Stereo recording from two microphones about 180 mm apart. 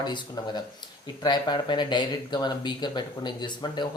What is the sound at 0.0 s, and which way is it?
Speech, 25° left (ahead or behind).